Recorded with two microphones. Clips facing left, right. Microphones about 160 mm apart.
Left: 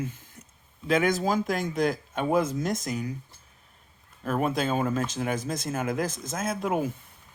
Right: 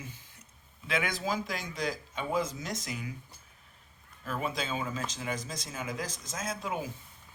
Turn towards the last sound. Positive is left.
turn(degrees=55)  # may be behind; listen again after turning